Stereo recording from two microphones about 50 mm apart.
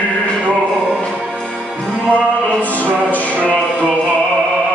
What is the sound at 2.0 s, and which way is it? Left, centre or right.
Music, left.